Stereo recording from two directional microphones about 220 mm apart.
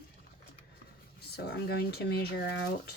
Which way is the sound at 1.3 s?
45° left (ahead or behind).